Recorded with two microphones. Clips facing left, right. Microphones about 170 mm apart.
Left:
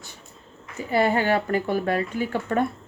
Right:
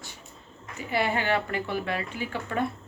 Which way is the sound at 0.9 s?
40° left (ahead or behind).